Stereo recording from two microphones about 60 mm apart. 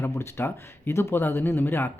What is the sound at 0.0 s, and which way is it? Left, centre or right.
Speech, left.